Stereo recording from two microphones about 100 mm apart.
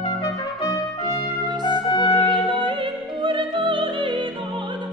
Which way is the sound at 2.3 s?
55° right (ahead or behind).